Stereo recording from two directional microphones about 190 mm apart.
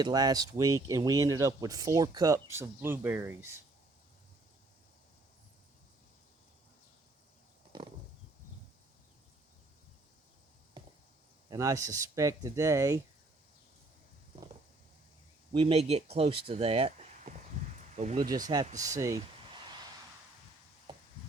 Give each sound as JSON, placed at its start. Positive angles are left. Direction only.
{"t": 0.0, "sound": "speech", "side_deg": -20}
{"t": 11.4, "sound": "speech", "side_deg": -15}
{"t": 15.5, "sound": "speech", "side_deg": -30}
{"t": 18.8, "sound": "speech", "side_deg": -15}